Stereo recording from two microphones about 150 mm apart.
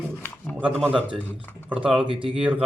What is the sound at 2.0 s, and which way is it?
Speech, 35° right (ahead or behind).